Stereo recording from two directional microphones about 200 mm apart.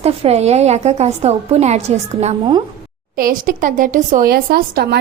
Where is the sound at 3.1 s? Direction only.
45° right (ahead or behind).